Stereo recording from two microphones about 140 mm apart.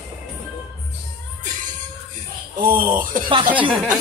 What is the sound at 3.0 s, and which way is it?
Speech, 75° right (ahead or behind).